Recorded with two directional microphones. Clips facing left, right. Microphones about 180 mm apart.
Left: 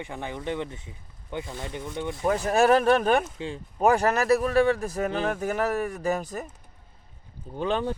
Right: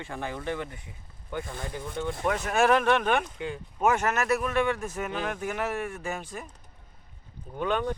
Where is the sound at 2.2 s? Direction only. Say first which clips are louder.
Left 3 dB; 35° left (ahead or behind).